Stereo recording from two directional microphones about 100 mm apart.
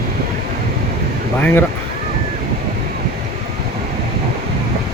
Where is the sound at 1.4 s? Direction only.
20° left (ahead or behind).